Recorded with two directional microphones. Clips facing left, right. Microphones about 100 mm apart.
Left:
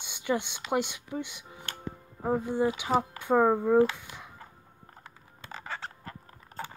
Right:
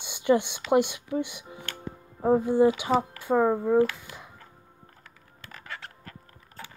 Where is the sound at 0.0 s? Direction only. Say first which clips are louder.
Right 7 dB; 15° right (ahead or behind).